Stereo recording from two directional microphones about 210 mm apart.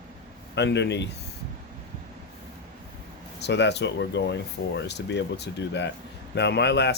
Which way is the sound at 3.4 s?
55° left (ahead or behind).